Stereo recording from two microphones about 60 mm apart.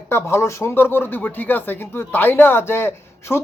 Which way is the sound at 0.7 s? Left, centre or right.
Left.